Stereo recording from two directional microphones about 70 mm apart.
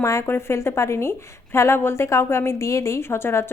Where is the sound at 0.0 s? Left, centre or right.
Left.